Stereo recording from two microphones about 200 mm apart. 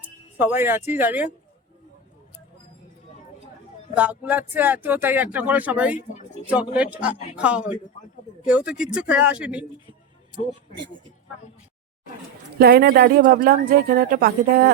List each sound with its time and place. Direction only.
0.0 s music: 10° right (ahead or behind)
0.9 s speech: 10° right (ahead or behind)
3.9 s speech: 5° right (ahead or behind)
12.5 s a woman's voice: 50° right (ahead or behind)